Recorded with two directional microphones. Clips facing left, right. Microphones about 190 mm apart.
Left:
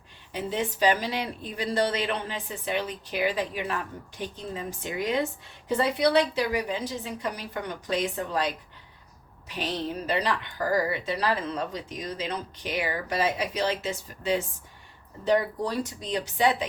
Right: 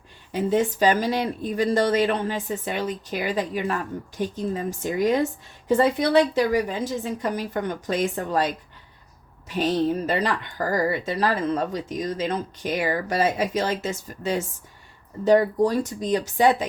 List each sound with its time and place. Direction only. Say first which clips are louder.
0.3 s speech: right 7 dB; 45° right (ahead or behind)
9.6 s speech: right 9 dB; 45° right (ahead or behind)